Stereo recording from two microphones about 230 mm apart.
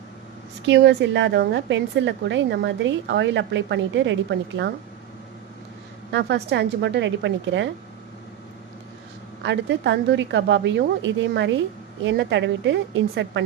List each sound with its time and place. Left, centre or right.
0.7 s a woman's voice: right
6.1 s a woman's voice: right
9.4 s a woman's voice: right